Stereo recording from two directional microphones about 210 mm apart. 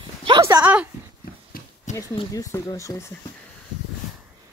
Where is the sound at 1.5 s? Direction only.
45° left (ahead or behind).